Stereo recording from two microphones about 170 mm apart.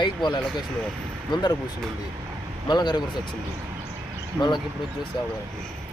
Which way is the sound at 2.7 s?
25° left (ahead or behind).